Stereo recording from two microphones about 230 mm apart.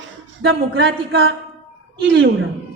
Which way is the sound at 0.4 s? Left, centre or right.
Right.